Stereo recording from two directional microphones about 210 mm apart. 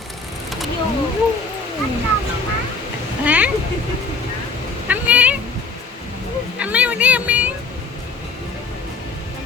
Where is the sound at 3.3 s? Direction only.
5° right (ahead or behind).